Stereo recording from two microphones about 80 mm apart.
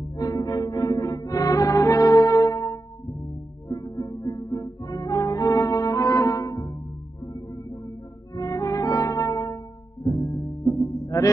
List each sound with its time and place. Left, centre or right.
0.2 s music: left
8.4 s brass instrument: left
10.0 s music: left